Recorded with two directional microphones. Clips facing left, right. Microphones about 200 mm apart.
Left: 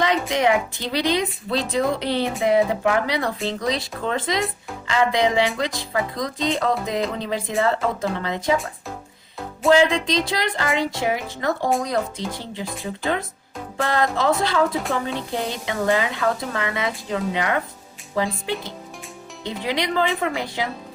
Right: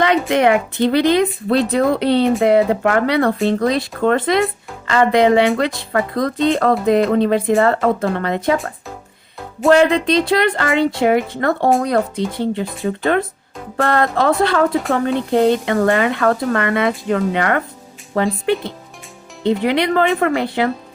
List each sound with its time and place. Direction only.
0.0 s a woman's voice: 60° right (ahead or behind)
9.7 s a woman's voice: 60° right (ahead or behind)
19.6 s a woman's voice: 60° right (ahead or behind)